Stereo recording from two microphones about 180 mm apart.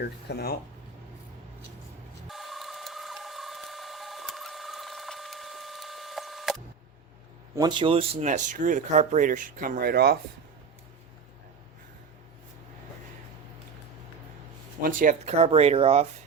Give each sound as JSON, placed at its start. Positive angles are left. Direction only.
{"t": 0.3, "sound": "speech", "side_deg": 65}
{"t": 2.2, "sound": "printer", "side_deg": 0}
{"t": 7.5, "sound": "speech", "side_deg": -25}
{"t": 14.8, "sound": "speech", "side_deg": -50}